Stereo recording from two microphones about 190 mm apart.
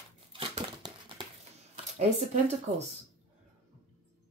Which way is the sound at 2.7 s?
45° right (ahead or behind).